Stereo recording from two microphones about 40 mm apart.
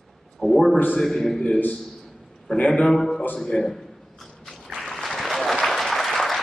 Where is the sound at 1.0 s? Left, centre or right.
Centre.